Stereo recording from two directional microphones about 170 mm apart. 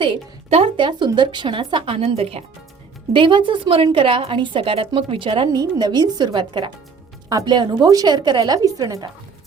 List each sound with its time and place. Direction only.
0.0 s a woman's voice: 30° right (ahead or behind)